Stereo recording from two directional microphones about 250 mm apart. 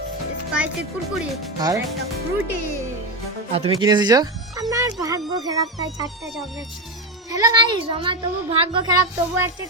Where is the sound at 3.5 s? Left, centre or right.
Centre.